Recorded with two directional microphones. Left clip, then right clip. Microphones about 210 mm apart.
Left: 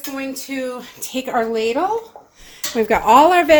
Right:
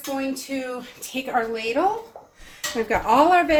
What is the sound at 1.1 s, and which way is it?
Speech, 50° left (ahead or behind).